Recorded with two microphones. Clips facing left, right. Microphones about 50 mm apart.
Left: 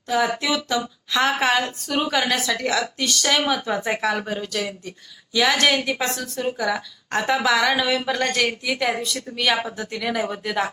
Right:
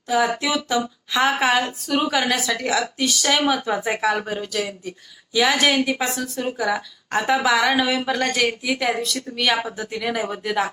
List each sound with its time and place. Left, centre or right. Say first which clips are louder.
0.1 s speech: right 1 dB; centre